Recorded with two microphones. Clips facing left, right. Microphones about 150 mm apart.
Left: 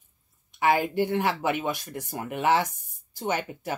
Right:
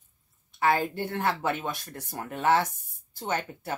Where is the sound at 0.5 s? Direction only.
15° left (ahead or behind).